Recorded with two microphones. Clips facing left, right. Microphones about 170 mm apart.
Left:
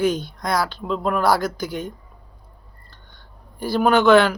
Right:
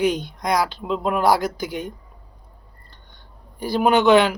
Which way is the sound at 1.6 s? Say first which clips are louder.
Even; 45° left (ahead or behind).